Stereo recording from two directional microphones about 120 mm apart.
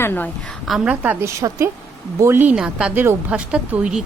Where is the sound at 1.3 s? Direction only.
25° right (ahead or behind).